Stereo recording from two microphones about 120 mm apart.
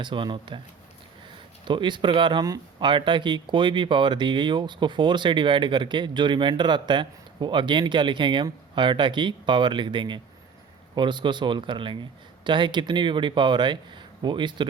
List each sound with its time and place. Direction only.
0.0 s speech: 40° right (ahead or behind)
1.6 s speech: 40° right (ahead or behind)